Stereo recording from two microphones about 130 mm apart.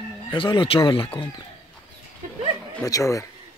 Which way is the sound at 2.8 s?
25° left (ahead or behind).